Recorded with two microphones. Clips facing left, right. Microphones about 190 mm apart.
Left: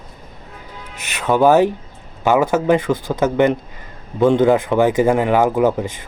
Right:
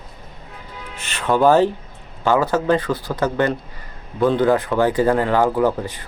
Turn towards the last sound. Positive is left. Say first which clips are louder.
# left 2 dB
turn(degrees=20)  # may be behind; listen again after turning